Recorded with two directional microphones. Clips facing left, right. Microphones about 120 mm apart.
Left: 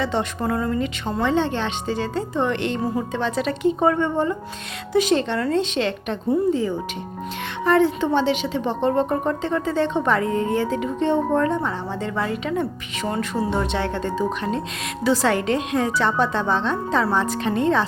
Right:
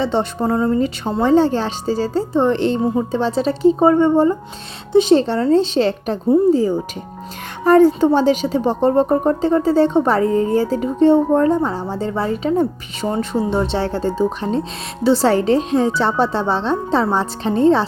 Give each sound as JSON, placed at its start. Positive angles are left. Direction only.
{"t": 0.0, "sound": "a woman's voice", "side_deg": -30}